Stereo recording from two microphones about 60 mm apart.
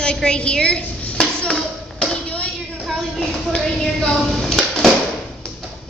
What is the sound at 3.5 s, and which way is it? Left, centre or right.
Speech, centre.